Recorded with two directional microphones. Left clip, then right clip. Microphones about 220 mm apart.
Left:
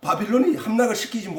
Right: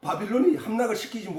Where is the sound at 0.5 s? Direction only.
45° left (ahead or behind).